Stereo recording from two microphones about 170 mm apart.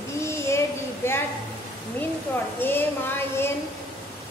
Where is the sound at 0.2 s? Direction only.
15° left (ahead or behind).